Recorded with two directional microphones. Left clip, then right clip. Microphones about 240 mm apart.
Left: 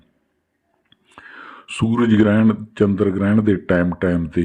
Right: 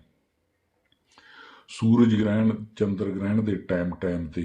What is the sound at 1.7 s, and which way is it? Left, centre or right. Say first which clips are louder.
Speech: left 5 dB; left.